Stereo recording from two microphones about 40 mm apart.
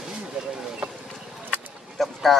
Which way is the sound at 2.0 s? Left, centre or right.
Centre.